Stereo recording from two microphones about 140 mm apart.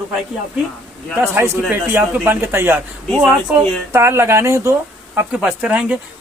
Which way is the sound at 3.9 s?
20° right (ahead or behind).